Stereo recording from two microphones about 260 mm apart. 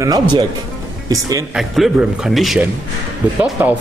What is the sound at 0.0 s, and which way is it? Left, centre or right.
Speech, centre.